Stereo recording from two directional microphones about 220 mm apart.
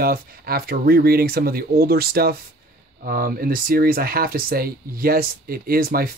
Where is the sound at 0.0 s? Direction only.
40° right (ahead or behind).